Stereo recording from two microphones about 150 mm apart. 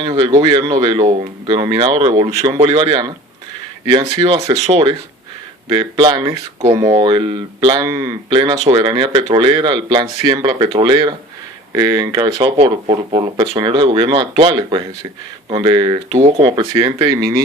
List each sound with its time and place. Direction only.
0.0 s speech: 30° right (ahead or behind)
2.6 s speech: 35° right (ahead or behind)
4.2 s speech: 35° right (ahead or behind)
7.8 s speech: 20° right (ahead or behind)
12.5 s speech: 40° right (ahead or behind)